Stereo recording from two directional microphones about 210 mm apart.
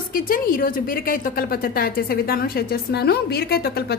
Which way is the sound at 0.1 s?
45° left (ahead or behind).